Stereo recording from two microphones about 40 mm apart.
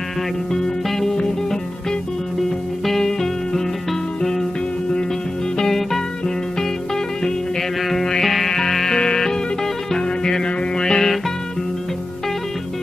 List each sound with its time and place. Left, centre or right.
0.8 s music: centre
2.8 s music: centre
5.6 s music: centre
7.9 s music: centre